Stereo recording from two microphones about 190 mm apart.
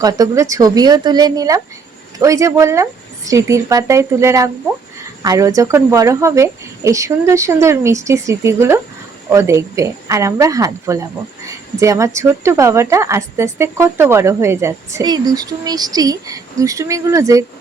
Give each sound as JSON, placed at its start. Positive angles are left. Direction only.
{"t": 0.0, "sound": "a woman's voice", "side_deg": -20}